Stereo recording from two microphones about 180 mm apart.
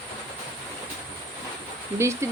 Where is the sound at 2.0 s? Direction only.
15° right (ahead or behind).